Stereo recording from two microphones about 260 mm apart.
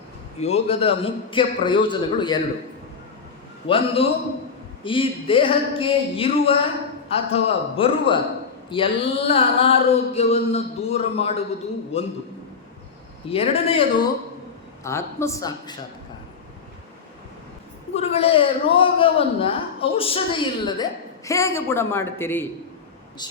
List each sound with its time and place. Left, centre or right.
0.3 s a man's voice: left
3.7 s a man's voice: left
13.2 s a man's voice: left
14.8 s a man's voice: centre
17.9 s a man's voice: left